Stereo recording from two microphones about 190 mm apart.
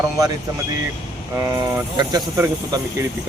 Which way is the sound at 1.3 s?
15° right (ahead or behind).